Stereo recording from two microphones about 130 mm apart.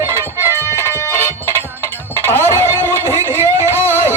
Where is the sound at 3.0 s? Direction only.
20° right (ahead or behind).